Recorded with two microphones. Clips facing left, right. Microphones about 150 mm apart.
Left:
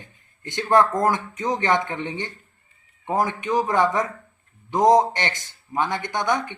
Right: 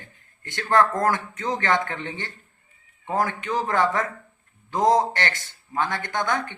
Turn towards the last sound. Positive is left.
turn(degrees=15)  # may be behind; listen again after turning